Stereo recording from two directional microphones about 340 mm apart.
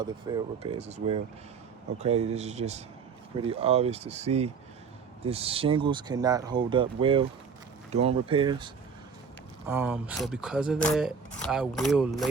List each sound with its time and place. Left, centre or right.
0.0 s speech: centre